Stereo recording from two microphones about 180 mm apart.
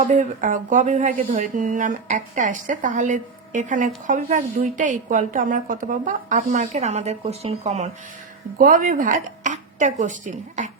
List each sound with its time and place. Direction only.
0.0 s speech: 45° right (ahead or behind)
8.5 s speech: 50° right (ahead or behind)